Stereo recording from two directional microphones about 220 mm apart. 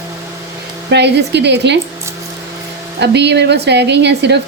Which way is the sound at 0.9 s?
50° right (ahead or behind).